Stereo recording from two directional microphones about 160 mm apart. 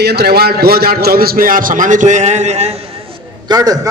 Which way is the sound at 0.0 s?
90° right.